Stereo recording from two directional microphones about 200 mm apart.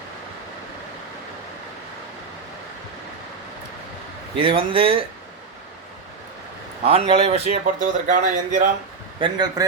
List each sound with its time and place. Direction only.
4.4 s speech: 25° right (ahead or behind)
6.8 s speech: 30° right (ahead or behind)
9.2 s speech: 20° right (ahead or behind)